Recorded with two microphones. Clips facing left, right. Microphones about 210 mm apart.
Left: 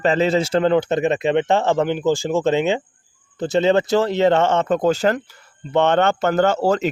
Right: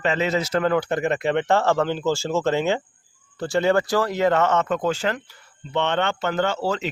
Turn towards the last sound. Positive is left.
turn(degrees=45)  # may be behind; listen again after turning